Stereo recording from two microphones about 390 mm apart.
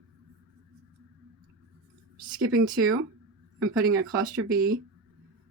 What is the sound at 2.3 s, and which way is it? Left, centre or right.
Speech, right.